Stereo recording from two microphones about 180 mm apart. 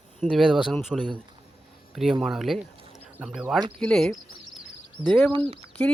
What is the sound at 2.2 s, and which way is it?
Speech, centre (ahead or behind).